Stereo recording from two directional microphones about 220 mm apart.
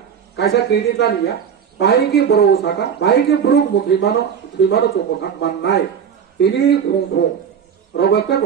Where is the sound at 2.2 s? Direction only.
50° left (ahead or behind).